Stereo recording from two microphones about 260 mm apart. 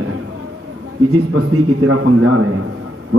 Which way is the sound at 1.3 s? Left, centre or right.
Right.